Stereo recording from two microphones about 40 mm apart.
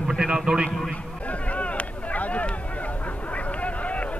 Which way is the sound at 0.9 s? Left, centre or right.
Left.